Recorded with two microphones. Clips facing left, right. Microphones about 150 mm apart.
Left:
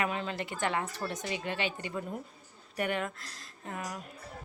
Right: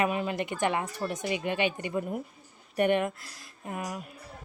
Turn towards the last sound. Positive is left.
turn(degrees=-15)  # may be behind; listen again after turning